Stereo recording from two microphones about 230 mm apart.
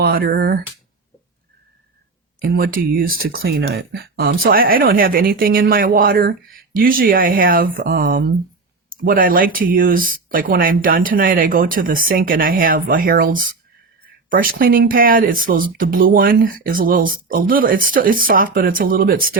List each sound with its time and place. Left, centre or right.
0.0 s speech: right
2.4 s speech: right